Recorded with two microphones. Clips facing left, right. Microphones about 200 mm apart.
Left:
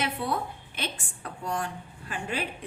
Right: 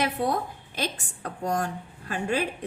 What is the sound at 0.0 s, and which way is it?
A woman's voice, 40° right (ahead or behind).